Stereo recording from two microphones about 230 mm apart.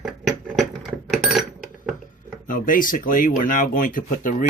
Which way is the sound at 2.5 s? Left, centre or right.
Left.